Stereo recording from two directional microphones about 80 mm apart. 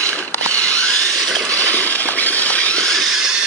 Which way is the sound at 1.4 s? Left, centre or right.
Centre.